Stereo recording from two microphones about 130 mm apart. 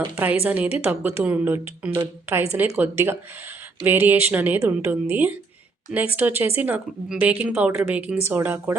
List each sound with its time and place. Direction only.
0.4 s a woman's voice: 10° right (ahead or behind)